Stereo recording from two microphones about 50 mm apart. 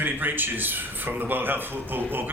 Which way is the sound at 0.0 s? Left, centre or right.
Right.